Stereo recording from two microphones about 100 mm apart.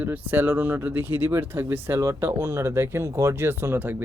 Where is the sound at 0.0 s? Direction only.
20° right (ahead or behind).